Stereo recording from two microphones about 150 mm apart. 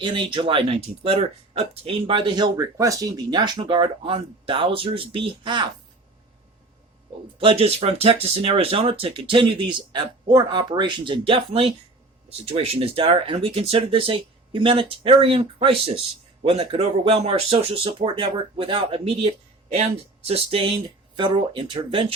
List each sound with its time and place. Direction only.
0.0 s speech: 30° right (ahead or behind)
7.3 s speech: 40° right (ahead or behind)